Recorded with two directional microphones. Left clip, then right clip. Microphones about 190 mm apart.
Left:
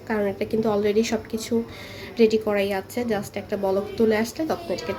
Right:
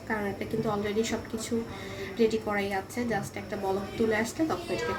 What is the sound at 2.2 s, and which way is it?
A woman's voice, 45° left (ahead or behind).